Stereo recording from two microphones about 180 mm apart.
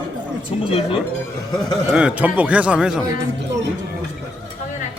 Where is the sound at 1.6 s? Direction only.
5° right (ahead or behind).